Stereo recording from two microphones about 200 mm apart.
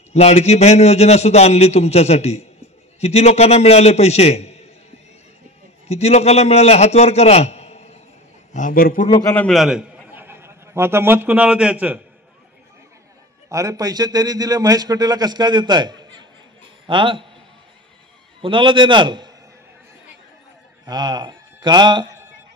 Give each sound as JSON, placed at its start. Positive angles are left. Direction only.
{"t": 0.1, "sound": "a man's voice", "side_deg": 30}
{"t": 5.9, "sound": "a man's voice", "side_deg": 30}
{"t": 8.5, "sound": "a man's voice", "side_deg": 45}
{"t": 9.3, "sound": "a man's voice", "side_deg": 5}
{"t": 13.5, "sound": "a man's voice", "side_deg": -15}
{"t": 18.4, "sound": "a man's voice", "side_deg": -25}
{"t": 20.8, "sound": "speech", "side_deg": -20}